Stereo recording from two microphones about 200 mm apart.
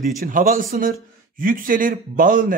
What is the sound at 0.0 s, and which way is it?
A man's voice, 40° right (ahead or behind).